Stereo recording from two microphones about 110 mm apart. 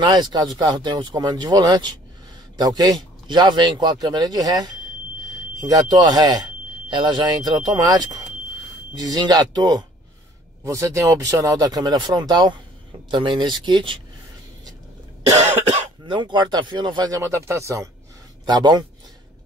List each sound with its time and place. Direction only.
0.0 s a man's voice: 40° right (ahead or behind)
16.1 s speech: 45° right (ahead or behind)
17.2 s speech: 25° right (ahead or behind)
18.4 s a man's voice: 40° right (ahead or behind)